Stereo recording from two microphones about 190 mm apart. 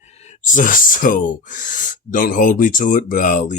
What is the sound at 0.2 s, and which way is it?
Speech, 40° left (ahead or behind).